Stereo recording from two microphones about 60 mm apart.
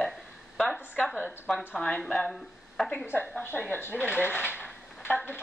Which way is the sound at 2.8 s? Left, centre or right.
Centre.